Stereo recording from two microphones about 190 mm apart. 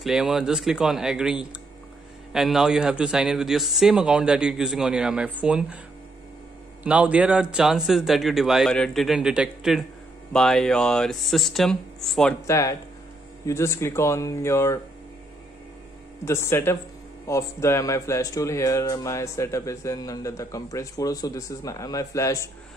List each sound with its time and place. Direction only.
0.0 s speech: 5° right (ahead or behind)
6.8 s speech: 5° right (ahead or behind)
12.4 s speech: 15° left (ahead or behind)
16.3 s speech: 15° left (ahead or behind)